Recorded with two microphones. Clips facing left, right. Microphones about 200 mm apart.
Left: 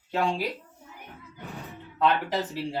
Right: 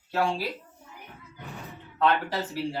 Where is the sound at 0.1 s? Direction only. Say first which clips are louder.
Even; 20° left (ahead or behind).